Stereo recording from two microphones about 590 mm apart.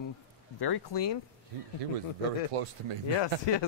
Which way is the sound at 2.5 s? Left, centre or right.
Right.